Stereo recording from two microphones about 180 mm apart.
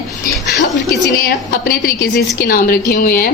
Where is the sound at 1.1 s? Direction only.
55° left (ahead or behind).